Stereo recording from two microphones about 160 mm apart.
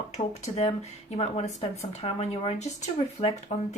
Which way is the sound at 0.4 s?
45° left (ahead or behind).